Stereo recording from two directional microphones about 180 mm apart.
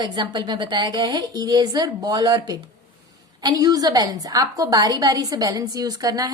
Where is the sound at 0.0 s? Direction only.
25° right (ahead or behind).